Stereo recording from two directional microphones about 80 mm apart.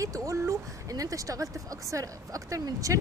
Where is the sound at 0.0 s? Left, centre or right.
Right.